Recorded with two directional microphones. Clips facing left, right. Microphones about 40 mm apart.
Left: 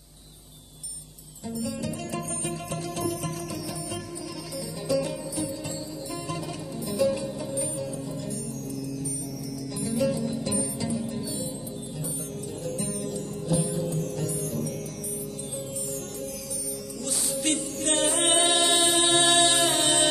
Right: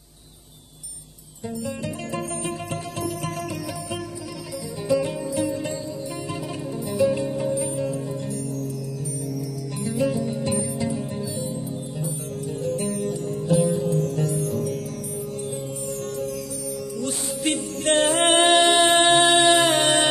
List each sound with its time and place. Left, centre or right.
1.6 s music: right
4.8 s music: right
5.3 s music: right
6.9 s music: right
7.2 s music: right
9.9 s music: centre
13.6 s music: right
17.3 s music: centre
17.8 s music: right
18.6 s a sound: right
19.3 s music: right